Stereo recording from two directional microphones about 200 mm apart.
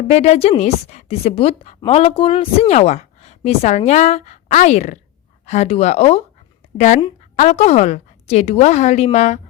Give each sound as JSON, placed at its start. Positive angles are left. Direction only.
{"t": 0.1, "sound": "a woman's voice", "side_deg": 30}